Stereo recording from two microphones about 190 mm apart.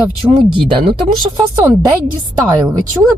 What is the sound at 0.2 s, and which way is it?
Speech, 10° right (ahead or behind).